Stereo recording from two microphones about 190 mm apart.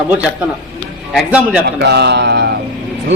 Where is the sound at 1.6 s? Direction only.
60° right (ahead or behind).